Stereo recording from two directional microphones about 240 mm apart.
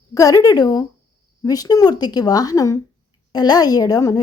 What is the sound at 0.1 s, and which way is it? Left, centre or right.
Speech, centre.